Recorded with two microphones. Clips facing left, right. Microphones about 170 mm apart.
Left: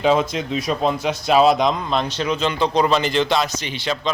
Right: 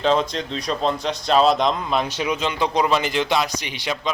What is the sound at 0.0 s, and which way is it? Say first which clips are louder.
Speech: left 2 dB; 5° left (ahead or behind).